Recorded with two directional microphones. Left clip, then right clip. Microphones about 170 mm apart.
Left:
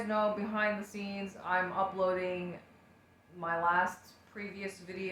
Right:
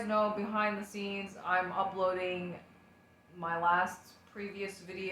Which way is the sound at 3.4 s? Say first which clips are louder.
Even; 10° left (ahead or behind).